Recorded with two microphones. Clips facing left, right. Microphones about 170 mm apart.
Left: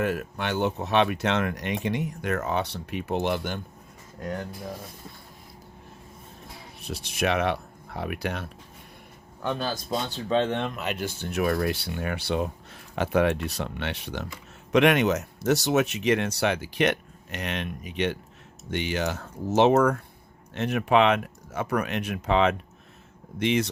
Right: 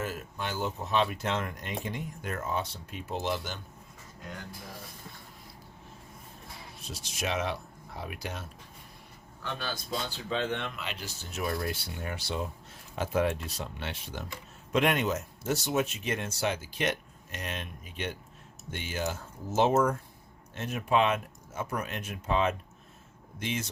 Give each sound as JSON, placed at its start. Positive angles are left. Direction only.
{"t": 0.0, "sound": "speech", "side_deg": 65}
{"t": 6.8, "sound": "speech", "side_deg": 60}
{"t": 9.9, "sound": "speech", "side_deg": 40}